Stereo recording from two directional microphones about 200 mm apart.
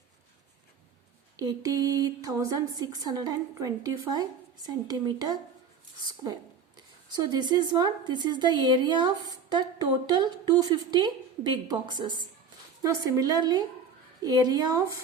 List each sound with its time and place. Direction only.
1.4 s a woman's voice: 20° right (ahead or behind)
6.7 s a woman's voice: 20° right (ahead or behind)